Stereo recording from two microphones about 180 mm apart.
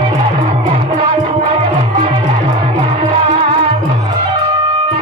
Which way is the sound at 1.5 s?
30° right (ahead or behind).